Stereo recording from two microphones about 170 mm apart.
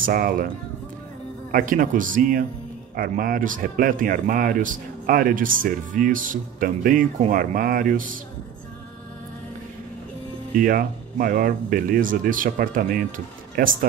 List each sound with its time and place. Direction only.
0.0 s speech: 55° right (ahead or behind)
1.5 s speech: 55° right (ahead or behind)
10.6 s speech: 55° right (ahead or behind)